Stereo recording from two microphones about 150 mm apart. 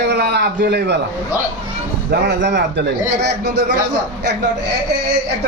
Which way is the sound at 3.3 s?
90° right.